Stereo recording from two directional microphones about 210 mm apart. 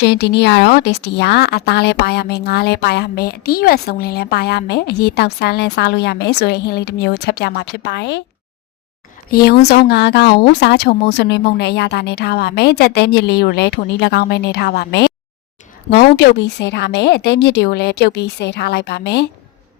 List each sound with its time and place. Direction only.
0.0 s a woman's voice: 55° left (ahead or behind)
9.3 s a woman's voice: 50° left (ahead or behind)